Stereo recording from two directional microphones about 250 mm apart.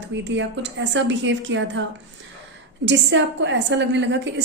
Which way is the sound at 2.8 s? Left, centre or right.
Right.